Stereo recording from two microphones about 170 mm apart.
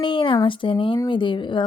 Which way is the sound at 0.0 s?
30° left (ahead or behind).